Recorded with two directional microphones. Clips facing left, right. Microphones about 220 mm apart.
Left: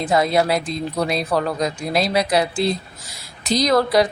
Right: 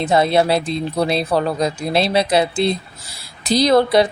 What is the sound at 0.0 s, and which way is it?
Speech, 25° right (ahead or behind).